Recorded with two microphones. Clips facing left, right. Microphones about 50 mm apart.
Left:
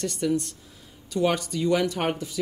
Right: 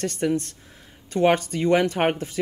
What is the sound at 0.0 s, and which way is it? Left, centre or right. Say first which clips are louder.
Speech: right 2 dB; right.